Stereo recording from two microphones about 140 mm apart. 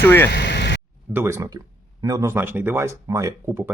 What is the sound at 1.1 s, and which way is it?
Speech, 20° right (ahead or behind).